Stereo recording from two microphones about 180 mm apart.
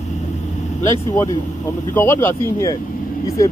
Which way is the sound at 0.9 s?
15° left (ahead or behind).